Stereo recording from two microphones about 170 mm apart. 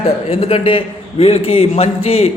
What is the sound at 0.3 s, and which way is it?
A man's voice, 35° left (ahead or behind).